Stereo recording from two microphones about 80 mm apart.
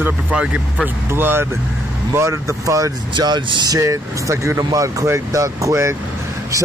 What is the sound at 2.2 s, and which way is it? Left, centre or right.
Speech, right.